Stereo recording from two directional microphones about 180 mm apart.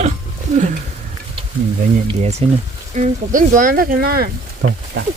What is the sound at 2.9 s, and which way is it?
Speech, 45° right (ahead or behind).